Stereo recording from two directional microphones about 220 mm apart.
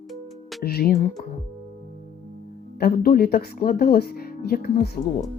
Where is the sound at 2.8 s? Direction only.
45° left (ahead or behind).